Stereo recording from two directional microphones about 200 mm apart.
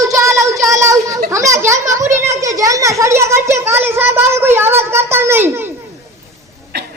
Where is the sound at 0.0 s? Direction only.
15° right (ahead or behind).